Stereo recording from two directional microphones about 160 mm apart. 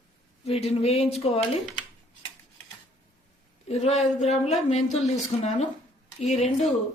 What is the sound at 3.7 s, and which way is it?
Speech, 45° left (ahead or behind).